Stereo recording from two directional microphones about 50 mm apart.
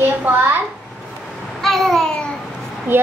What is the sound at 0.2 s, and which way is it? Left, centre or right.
Speech, right.